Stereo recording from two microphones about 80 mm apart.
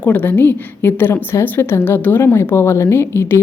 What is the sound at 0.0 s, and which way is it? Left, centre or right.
A woman's voice, centre.